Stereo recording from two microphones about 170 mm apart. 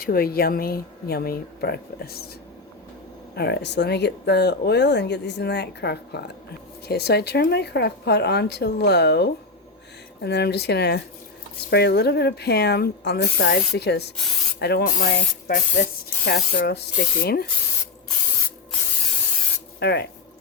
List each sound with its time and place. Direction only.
0.0 s speech: 60° left (ahead or behind)
3.3 s a woman's voice: 75° left (ahead or behind)
19.8 s a woman's voice: 75° left (ahead or behind)